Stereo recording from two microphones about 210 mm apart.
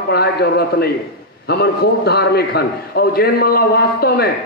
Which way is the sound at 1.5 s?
50° left (ahead or behind).